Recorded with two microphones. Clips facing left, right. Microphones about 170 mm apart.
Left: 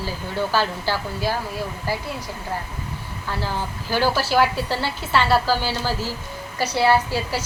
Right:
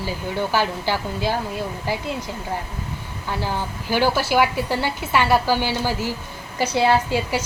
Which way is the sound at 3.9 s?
15° right (ahead or behind).